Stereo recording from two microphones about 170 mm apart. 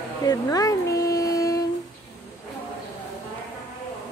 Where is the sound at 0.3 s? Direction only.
20° left (ahead or behind).